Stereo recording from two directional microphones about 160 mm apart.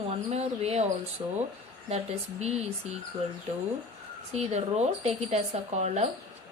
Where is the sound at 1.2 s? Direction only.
30° right (ahead or behind).